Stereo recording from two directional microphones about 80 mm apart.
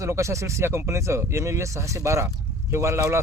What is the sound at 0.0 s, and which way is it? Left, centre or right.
Speech, right.